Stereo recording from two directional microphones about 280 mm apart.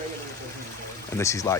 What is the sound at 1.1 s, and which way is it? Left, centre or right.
Speech, centre.